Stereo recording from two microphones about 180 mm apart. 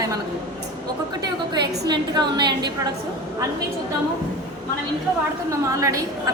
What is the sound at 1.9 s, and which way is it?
Speech, 25° right (ahead or behind).